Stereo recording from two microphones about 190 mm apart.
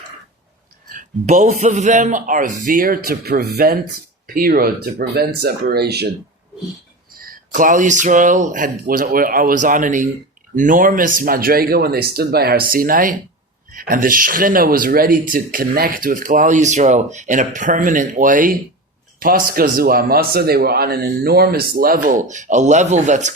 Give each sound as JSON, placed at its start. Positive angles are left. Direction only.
{"t": 0.9, "sound": "speech", "side_deg": -40}
{"t": 7.2, "sound": "speech", "side_deg": -45}